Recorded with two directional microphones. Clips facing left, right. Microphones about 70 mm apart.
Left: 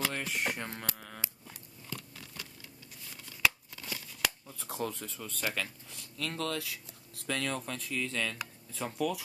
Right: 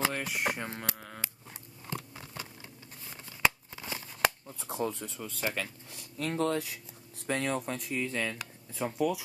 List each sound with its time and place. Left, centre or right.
0.0 s speech: centre
1.9 s a sound: right
4.5 s speech: right
6.1 s speech: right; by 9.2 s centre